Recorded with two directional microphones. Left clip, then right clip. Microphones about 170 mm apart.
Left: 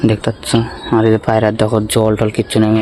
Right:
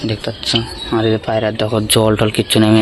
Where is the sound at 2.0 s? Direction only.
5° left (ahead or behind).